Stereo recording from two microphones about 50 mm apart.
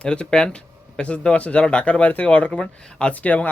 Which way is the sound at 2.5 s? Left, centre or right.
Centre.